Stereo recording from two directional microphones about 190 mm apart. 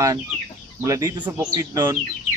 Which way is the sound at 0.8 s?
20° right (ahead or behind).